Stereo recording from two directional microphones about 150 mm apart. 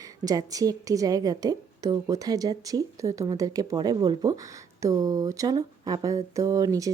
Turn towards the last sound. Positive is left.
turn(degrees=-25)  # may be behind; listen again after turning